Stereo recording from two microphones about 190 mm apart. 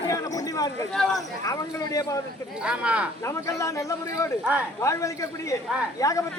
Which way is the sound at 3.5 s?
15° left (ahead or behind).